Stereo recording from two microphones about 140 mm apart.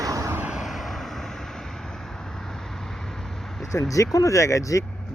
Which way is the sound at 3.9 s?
25° left (ahead or behind).